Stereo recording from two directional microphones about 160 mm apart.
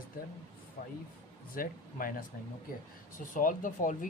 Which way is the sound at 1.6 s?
60° left (ahead or behind).